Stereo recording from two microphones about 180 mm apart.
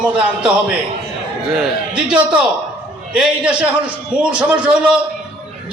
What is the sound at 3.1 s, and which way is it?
A man's voice, 5° right (ahead or behind).